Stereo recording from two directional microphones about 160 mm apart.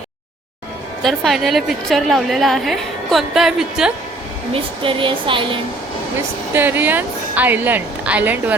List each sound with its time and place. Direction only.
1.0 s a woman's voice: centre (ahead or behind)
4.5 s a woman's voice: 30° right (ahead or behind)
6.5 s speech: 10° right (ahead or behind)